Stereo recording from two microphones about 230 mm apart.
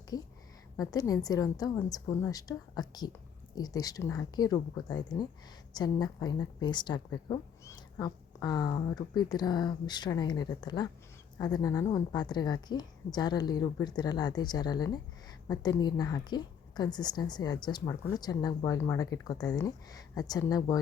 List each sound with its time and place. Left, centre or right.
0.1 s a woman's voice: centre